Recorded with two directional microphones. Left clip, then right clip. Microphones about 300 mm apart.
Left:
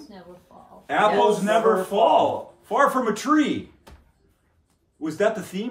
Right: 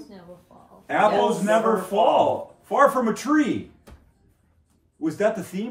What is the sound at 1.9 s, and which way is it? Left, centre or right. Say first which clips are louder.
Speech: right 1 dB; left.